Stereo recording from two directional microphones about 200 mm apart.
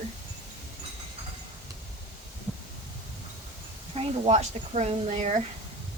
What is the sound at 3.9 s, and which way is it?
Speech, 30° right (ahead or behind).